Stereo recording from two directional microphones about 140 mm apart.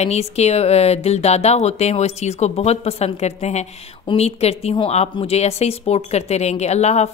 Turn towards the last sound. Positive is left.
turn(degrees=50)  # may be behind; listen again after turning